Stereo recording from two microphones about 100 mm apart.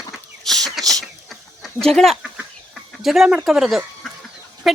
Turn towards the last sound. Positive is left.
turn(degrees=0)  # may be behind; listen again after turning